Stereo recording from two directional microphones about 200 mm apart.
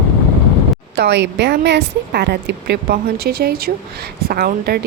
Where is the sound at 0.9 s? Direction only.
60° right (ahead or behind).